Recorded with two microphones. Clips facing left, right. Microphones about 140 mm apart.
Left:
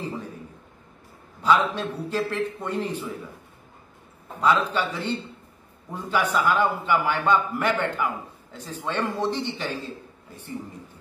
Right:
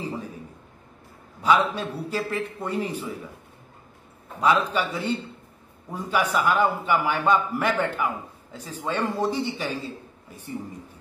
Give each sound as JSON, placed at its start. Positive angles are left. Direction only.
{"t": 0.0, "sound": "a man's voice", "side_deg": -10}
{"t": 1.4, "sound": "a man's voice", "side_deg": -10}
{"t": 4.4, "sound": "a man's voice", "side_deg": -10}
{"t": 5.9, "sound": "a man's voice", "side_deg": -10}